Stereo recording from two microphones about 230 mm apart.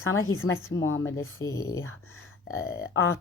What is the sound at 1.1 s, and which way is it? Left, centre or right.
Speech, centre.